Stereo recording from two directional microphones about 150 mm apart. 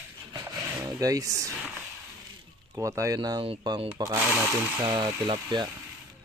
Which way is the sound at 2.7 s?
20° right (ahead or behind).